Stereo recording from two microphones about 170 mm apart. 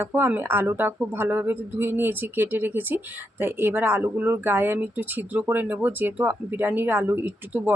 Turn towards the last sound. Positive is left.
turn(degrees=-10)  # may be behind; listen again after turning